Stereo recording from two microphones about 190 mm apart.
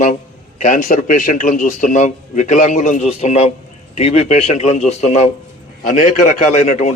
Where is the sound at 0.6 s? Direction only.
40° left (ahead or behind).